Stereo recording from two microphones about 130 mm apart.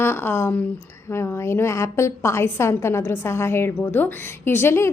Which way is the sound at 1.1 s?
20° left (ahead or behind).